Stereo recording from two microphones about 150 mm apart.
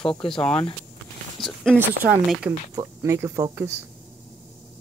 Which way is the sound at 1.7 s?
15° right (ahead or behind).